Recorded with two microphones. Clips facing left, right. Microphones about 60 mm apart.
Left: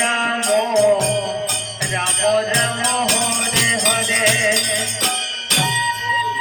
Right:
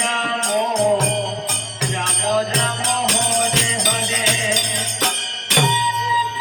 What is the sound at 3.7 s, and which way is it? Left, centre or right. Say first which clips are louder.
Jingle bell: left 3 dB; left.